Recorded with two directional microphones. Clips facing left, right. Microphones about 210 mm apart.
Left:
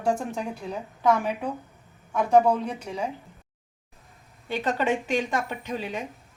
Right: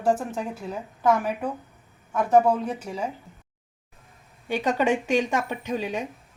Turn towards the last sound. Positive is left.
turn(degrees=-15)  # may be behind; listen again after turning